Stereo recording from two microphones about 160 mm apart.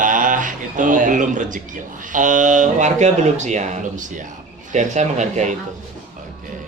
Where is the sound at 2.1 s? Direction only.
55° right (ahead or behind).